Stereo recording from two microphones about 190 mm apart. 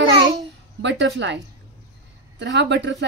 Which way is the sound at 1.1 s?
70° right (ahead or behind).